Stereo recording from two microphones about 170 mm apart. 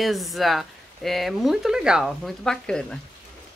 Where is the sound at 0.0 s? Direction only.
Centre (ahead or behind).